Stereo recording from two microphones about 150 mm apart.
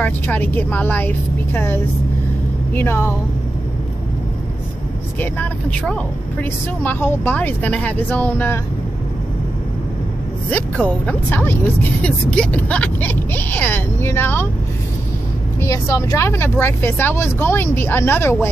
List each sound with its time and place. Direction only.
0.0 s speech: 10° left (ahead or behind)
5.2 s speech: 10° left (ahead or behind)
10.5 s speech: 10° left (ahead or behind)
15.6 s speech: 20° left (ahead or behind)